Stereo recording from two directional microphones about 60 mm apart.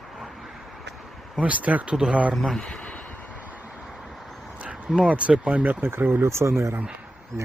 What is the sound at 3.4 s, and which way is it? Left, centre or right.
Vehicle, right.